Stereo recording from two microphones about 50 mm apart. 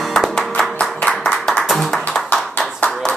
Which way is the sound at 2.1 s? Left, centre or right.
Left.